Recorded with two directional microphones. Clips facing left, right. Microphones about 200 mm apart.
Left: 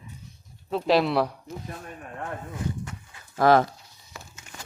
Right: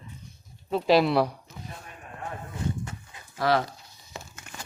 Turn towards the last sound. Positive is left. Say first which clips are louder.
# left 6 dB
turn(degrees=50)  # may be behind; listen again after turning